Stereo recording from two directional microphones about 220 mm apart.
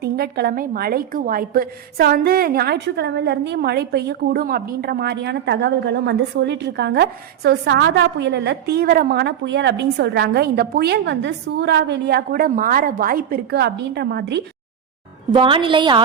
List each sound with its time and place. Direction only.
0.0 s a woman's voice: 45° right (ahead or behind)
15.3 s a woman's voice: 25° right (ahead or behind)